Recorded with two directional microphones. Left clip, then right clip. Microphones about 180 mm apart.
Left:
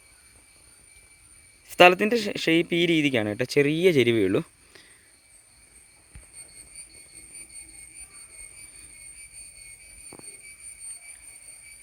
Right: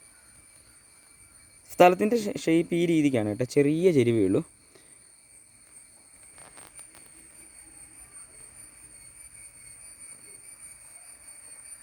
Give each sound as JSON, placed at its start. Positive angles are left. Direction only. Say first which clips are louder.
{"t": 1.6, "sound": "speech", "louder": "left 3 dB", "side_deg": 0}